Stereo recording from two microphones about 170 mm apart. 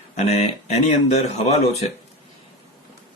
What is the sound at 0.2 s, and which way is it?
Speech, 40° left (ahead or behind).